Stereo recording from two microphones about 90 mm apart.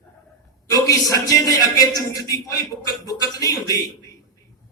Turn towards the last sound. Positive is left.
turn(degrees=40)  # may be behind; listen again after turning